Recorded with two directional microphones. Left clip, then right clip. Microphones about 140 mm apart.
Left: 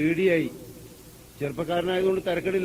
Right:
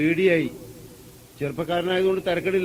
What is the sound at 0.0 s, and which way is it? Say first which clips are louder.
A man's voice: right 3 dB; 35° right (ahead or behind).